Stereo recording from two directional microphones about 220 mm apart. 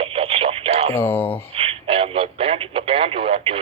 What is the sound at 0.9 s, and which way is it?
Speech, 10° left (ahead or behind).